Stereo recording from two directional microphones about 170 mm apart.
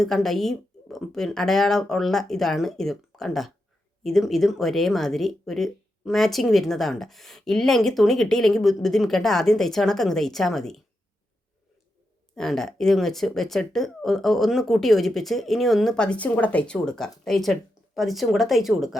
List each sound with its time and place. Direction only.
0.0 s speech: centre (ahead or behind)
12.4 s speech: 5° left (ahead or behind)